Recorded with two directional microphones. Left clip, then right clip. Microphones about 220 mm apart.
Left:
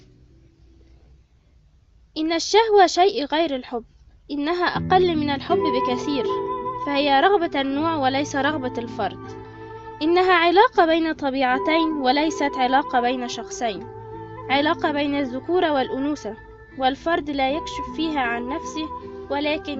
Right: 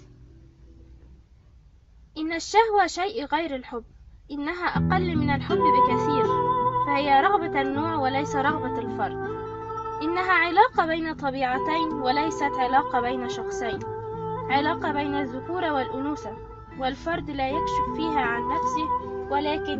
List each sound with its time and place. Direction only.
2.1 s a woman's voice: 50° left (ahead or behind)